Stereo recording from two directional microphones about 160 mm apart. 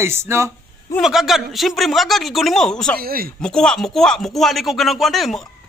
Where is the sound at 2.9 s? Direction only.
70° right (ahead or behind).